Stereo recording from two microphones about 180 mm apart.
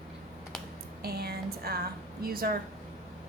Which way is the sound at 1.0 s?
60° right (ahead or behind).